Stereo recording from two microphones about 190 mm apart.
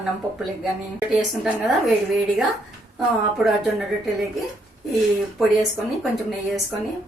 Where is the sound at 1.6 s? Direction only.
Centre (ahead or behind).